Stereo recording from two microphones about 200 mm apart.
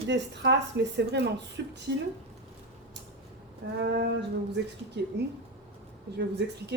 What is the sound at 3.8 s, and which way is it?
A woman's voice, 55° right (ahead or behind).